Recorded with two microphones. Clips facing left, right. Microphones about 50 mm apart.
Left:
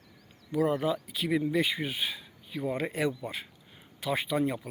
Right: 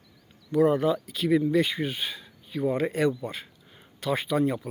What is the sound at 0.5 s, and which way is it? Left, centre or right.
Speech, centre.